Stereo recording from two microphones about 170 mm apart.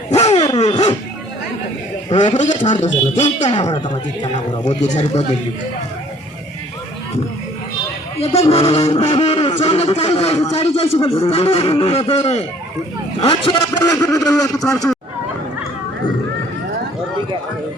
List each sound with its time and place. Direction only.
0.1 s a sound: 40° left (ahead or behind)
2.0 s a man's voice: 35° left (ahead or behind)
3.2 s a man's voice: 30° left (ahead or behind)
4.6 s speech: 45° left (ahead or behind)
8.2 s a man's voice: 35° left (ahead or behind)
13.9 s a woman's voice: 20° left (ahead or behind)
14.6 s speech: 5° left (ahead or behind)